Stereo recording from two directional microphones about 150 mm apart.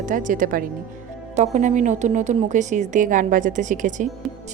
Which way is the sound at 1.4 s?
55° right (ahead or behind).